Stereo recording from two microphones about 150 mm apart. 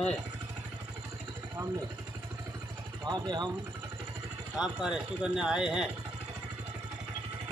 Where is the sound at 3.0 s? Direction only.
30° right (ahead or behind).